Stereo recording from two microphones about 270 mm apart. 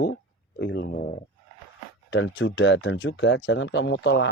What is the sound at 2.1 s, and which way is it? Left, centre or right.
Speech, left.